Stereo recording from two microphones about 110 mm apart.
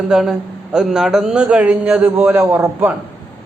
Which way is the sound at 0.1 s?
5° right (ahead or behind).